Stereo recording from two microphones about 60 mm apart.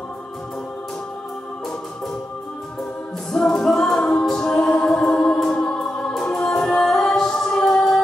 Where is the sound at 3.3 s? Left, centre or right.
Centre.